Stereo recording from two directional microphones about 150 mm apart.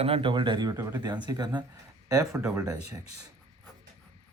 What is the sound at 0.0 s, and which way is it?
Speech, 40° right (ahead or behind).